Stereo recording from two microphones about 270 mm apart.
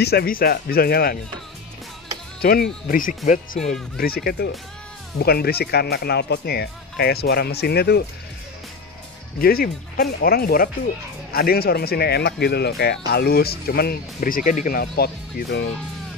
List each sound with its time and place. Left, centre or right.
0.0 s speech: left
2.4 s speech: left
9.4 s speech: left